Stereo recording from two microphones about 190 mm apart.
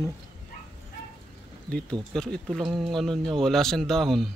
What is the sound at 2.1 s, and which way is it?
Speech, 5° left (ahead or behind).